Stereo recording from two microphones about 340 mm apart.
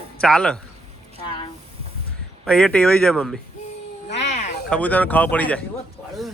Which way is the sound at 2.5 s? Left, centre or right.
Centre.